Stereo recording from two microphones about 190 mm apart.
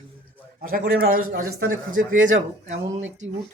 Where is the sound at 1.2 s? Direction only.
90° right.